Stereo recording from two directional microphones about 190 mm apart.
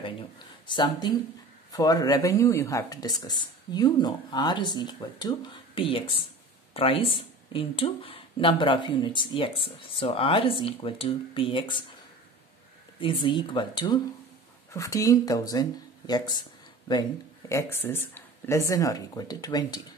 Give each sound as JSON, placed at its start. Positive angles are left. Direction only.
{"t": 0.7, "sound": "speech", "side_deg": 25}
{"t": 13.0, "sound": "speech", "side_deg": 25}